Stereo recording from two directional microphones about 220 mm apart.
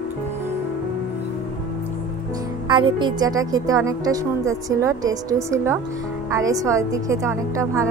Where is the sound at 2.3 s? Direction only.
20° right (ahead or behind).